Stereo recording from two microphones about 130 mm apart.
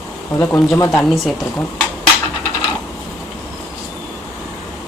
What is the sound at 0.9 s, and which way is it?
Speech, centre (ahead or behind).